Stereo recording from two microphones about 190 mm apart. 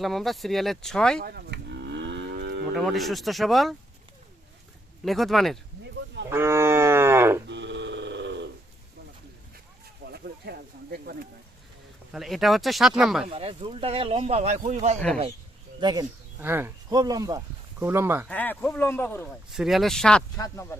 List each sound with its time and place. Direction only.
0.0 s speech: centre (ahead or behind)
1.2 s moo: 55° right (ahead or behind)
2.7 s speech: centre (ahead or behind)
5.0 s speech: centre (ahead or behind)
6.3 s cattle: 15° right (ahead or behind)
7.4 s a sound: 65° right (ahead or behind)
10.0 s a sound: 55° right (ahead or behind)
12.1 s speech: centre (ahead or behind)
13.2 s a man's voice: 30° right (ahead or behind)
15.8 s speech: 20° right (ahead or behind)
18.3 s speech: 5° left (ahead or behind)
19.5 s speech: centre (ahead or behind)
20.3 s speech: 15° left (ahead or behind)